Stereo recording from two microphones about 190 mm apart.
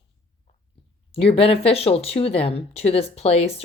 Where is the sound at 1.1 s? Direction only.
30° left (ahead or behind).